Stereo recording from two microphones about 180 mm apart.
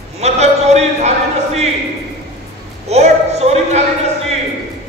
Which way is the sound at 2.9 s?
35° right (ahead or behind).